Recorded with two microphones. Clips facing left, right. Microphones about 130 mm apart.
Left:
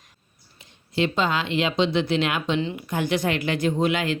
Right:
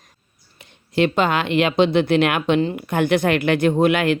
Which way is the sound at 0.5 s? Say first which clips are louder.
Right 5 dB; 60° right (ahead or behind).